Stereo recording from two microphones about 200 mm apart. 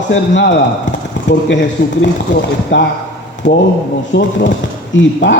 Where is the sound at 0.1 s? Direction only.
60° left (ahead or behind).